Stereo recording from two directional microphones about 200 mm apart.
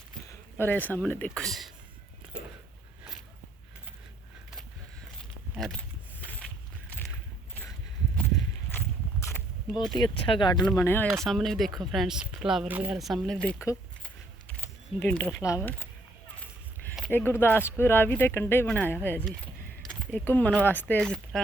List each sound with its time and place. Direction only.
0.6 s speech: 10° left (ahead or behind)
9.2 s a sound: 15° left (ahead or behind)
10.0 s speech: 25° left (ahead or behind)
10.6 s speech: 5° left (ahead or behind)
13.7 s a sound: 10° left (ahead or behind)
17.1 s speech: 10° left (ahead or behind)